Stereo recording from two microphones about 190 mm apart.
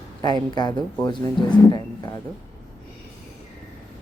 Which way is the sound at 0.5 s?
20° left (ahead or behind).